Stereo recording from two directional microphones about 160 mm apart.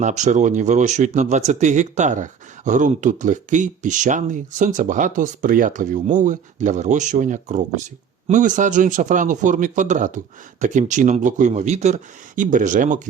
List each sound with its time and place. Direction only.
0.0 s speech: 50° right (ahead or behind)